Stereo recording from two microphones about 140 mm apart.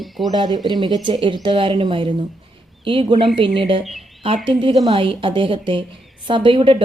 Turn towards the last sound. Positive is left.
turn(degrees=-40)  # may be behind; listen again after turning